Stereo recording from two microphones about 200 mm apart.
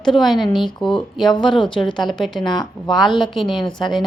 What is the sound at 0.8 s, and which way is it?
A woman's voice, centre (ahead or behind).